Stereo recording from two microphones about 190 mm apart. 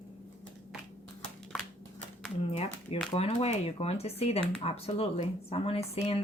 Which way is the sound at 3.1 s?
30° left (ahead or behind).